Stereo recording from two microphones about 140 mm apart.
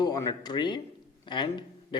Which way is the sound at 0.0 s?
25° left (ahead or behind).